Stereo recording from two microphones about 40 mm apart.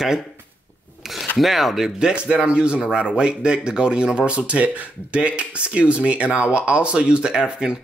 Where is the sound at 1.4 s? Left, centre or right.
Centre.